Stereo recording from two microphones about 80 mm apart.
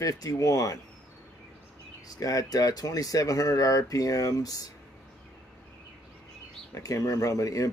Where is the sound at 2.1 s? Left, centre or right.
Left.